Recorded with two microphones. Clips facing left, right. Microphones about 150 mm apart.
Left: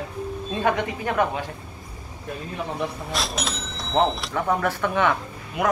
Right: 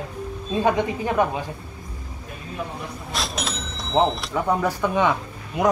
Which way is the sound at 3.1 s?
Centre (ahead or behind).